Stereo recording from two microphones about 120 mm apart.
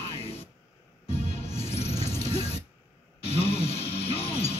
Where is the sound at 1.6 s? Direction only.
60° left (ahead or behind).